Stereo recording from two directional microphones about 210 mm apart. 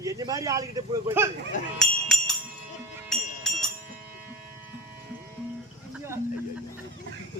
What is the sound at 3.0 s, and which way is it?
Music, centre (ahead or behind).